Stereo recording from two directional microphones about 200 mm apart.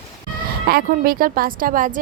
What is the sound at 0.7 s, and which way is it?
A woman's voice, 45° right (ahead or behind).